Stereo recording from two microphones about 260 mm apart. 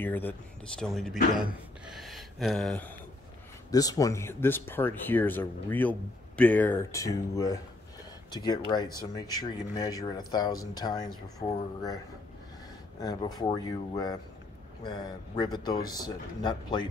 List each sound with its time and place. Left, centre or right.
0.0 s speech: centre
3.7 s speech: centre
13.0 s speech: centre